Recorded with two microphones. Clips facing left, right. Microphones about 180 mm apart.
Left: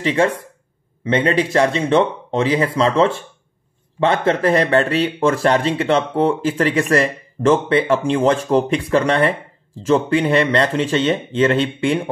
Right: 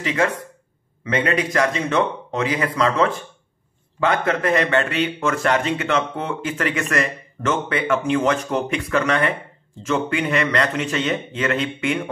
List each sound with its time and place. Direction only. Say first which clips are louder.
0.0 s speech: left 4 dB; 30° left (ahead or behind)